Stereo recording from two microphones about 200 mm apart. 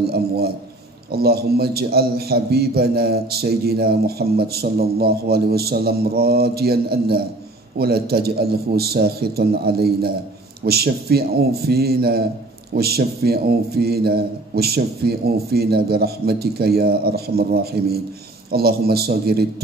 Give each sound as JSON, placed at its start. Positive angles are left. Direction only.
{"t": 1.1, "sound": "a man's voice", "side_deg": -50}